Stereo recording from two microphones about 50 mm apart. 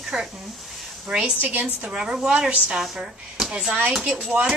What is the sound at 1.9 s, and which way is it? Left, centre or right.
Speech, centre.